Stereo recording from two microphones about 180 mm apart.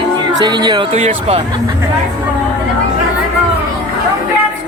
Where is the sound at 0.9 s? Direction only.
35° right (ahead or behind).